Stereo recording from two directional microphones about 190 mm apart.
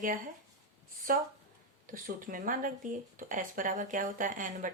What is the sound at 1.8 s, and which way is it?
Speech, 45° right (ahead or behind).